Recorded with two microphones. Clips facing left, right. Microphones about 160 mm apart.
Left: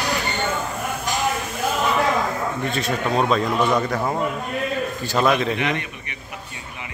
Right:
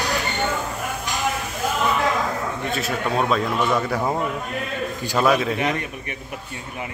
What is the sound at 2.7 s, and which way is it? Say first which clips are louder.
A man's voice: even; 5° right (ahead or behind).